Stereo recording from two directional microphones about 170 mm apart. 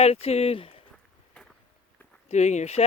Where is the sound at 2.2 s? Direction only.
40° left (ahead or behind).